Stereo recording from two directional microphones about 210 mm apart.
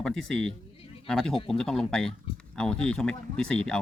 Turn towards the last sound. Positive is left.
turn(degrees=5)  # may be behind; listen again after turning